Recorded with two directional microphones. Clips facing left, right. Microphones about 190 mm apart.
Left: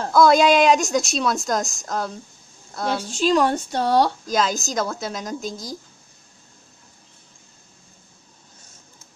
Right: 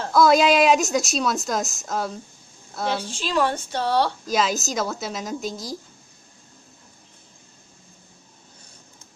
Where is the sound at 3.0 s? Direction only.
40° left (ahead or behind).